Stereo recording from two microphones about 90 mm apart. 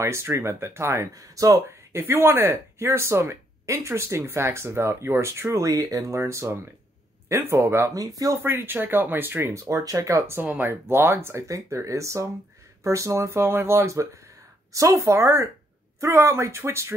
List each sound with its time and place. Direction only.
0.0 s speech: 30° right (ahead or behind)
8.4 s speech: 25° right (ahead or behind)